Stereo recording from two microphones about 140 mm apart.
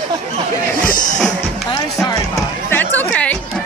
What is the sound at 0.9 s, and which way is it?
Music, 65° left (ahead or behind).